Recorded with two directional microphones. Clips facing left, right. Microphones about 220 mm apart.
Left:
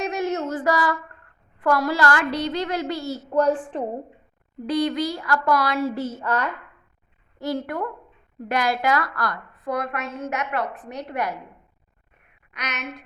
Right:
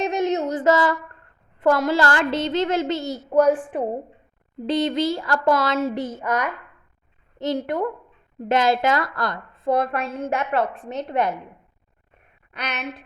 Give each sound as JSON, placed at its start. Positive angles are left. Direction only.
{"t": 0.0, "sound": "a sound", "side_deg": -20}
{"t": 1.6, "sound": "a woman's voice", "side_deg": -25}
{"t": 3.3, "sound": "a woman's voice", "side_deg": -10}
{"t": 4.6, "sound": "a woman's voice", "side_deg": -25}
{"t": 12.5, "sound": "speech", "side_deg": -30}